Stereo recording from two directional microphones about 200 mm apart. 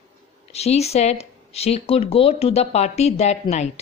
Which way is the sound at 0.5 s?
30° left (ahead or behind).